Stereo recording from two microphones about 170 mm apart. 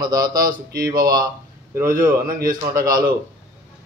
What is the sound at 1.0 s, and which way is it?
Speech, 20° right (ahead or behind).